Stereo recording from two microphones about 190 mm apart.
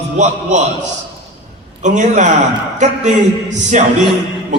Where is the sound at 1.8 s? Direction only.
40° right (ahead or behind).